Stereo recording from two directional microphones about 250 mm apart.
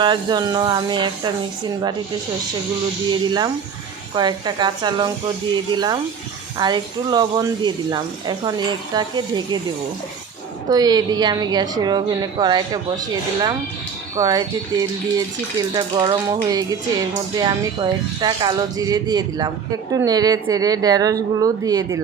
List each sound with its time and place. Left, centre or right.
0.0 s speech: centre
3.2 s speech: centre
10.7 s speech: centre
14.2 s speech: centre